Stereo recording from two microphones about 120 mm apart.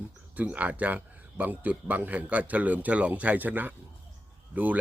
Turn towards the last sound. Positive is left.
turn(degrees=-15)  # may be behind; listen again after turning